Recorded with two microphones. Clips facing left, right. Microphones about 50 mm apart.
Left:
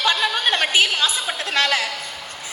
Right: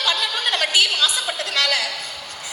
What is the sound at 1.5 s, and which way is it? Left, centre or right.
Speech, left.